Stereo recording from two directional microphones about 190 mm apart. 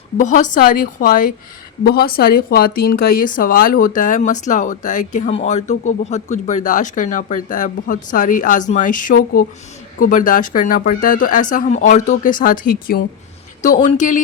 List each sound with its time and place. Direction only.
0.2 s speech: 40° left (ahead or behind)